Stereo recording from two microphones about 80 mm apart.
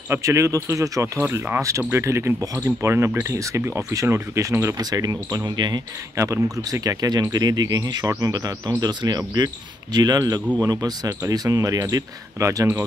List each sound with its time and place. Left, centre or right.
0.1 s speech: right
4.7 s speech: right
6.1 s speech: right